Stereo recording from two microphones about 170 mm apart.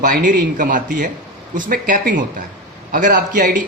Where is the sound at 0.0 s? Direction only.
50° right (ahead or behind).